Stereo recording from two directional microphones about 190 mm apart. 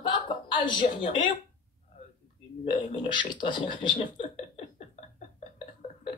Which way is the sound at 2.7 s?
25° left (ahead or behind).